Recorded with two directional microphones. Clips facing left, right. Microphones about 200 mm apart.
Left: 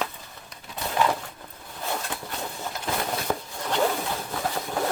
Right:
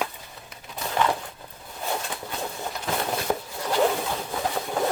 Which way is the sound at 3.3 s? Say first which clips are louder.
Right 2 dB; 20° right (ahead or behind).